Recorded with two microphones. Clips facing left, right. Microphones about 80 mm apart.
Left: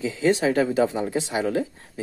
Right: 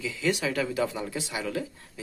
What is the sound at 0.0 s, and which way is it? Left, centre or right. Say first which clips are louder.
Speech: left 7 dB; left.